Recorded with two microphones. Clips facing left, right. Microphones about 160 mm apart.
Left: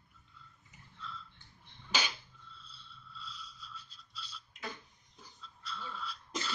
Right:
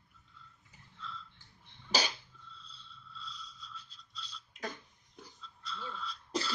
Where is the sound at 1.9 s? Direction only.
35° right (ahead or behind).